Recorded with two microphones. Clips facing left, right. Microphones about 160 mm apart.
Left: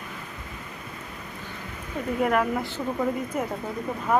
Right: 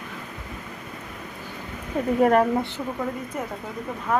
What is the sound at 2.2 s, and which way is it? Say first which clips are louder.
Speech: right 5 dB; 40° right (ahead or behind).